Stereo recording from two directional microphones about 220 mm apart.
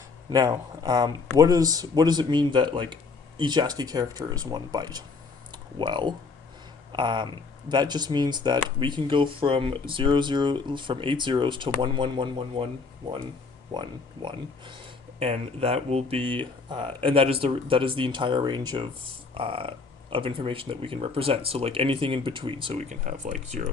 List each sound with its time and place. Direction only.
0.3 s speech: 15° right (ahead or behind)
13.7 s speech: 20° right (ahead or behind)